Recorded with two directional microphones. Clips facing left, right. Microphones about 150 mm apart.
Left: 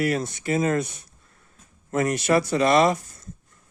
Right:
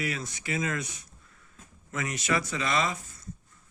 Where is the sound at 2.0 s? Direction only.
60° left (ahead or behind).